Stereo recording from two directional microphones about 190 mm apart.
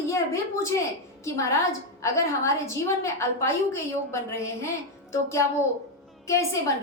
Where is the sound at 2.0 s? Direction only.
15° left (ahead or behind).